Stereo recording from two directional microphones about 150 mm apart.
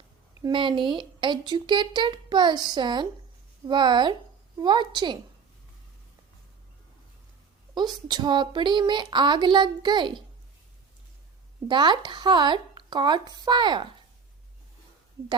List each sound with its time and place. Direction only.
0.4 s a woman's voice: 30° right (ahead or behind)
7.8 s speech: 30° right (ahead or behind)
11.7 s speech: 30° right (ahead or behind)